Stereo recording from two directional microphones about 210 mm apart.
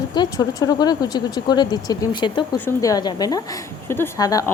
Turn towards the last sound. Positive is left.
turn(degrees=15)  # may be behind; listen again after turning